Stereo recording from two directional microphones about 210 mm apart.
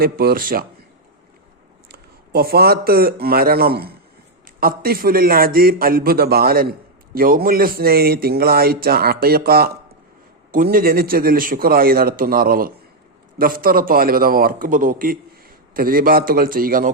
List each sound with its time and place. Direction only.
0.0 s a man's voice: 45° right (ahead or behind)
1.9 s a man's voice: 45° right (ahead or behind)